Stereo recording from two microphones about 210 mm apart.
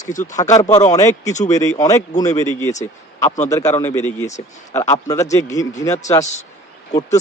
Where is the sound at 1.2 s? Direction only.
35° left (ahead or behind).